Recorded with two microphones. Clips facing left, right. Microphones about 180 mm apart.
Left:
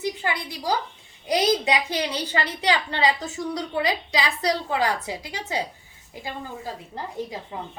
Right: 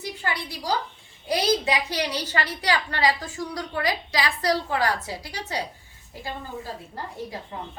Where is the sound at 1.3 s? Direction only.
20° left (ahead or behind).